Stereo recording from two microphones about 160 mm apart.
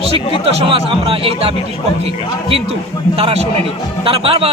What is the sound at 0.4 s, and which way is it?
A man's voice, 35° right (ahead or behind).